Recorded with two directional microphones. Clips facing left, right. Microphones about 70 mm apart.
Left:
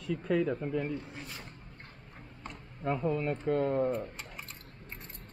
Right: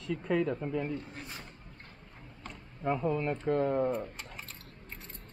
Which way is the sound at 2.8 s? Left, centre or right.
Centre.